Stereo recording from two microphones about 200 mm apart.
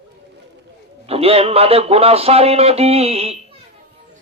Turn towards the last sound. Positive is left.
turn(degrees=-30)  # may be behind; listen again after turning